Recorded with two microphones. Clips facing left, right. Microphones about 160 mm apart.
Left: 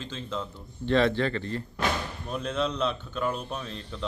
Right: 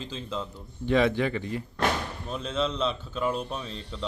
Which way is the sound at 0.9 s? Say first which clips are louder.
Even; 10° right (ahead or behind).